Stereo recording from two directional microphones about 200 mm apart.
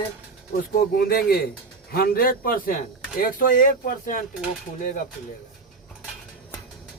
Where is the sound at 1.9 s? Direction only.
50° left (ahead or behind).